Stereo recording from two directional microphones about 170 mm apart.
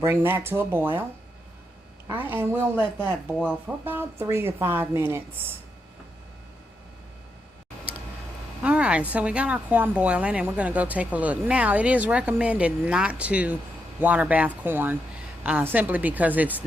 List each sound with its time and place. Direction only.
0.0 s a woman's voice: 15° right (ahead or behind)
2.0 s a woman's voice: 10° right (ahead or behind)
8.6 s a woman's voice: 5° right (ahead or behind)